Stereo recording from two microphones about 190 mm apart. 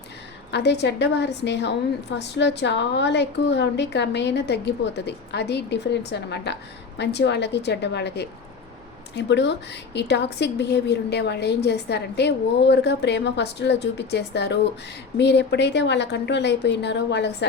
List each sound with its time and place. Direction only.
0.5 s a woman's voice: 60° left (ahead or behind)